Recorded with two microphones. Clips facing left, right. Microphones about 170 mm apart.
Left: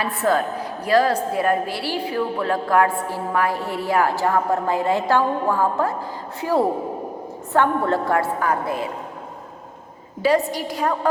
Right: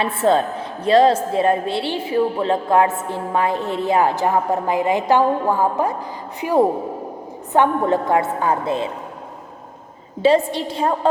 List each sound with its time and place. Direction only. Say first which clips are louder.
0.0 s a woman's voice: right 3 dB; 25° right (ahead or behind)
10.2 s a woman's voice: right 3 dB; 25° right (ahead or behind)